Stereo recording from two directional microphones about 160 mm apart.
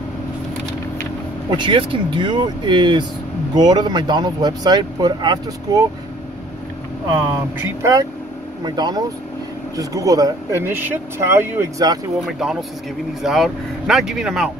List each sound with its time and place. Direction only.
1.6 s speech: 30° right (ahead or behind)
7.6 s speech: 20° right (ahead or behind)
12.3 s speech: centre (ahead or behind)